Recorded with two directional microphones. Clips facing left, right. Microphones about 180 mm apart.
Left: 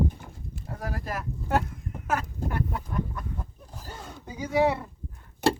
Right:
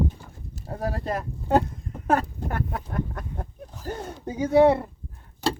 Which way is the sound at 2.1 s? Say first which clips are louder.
Right 5 dB; 35° right (ahead or behind).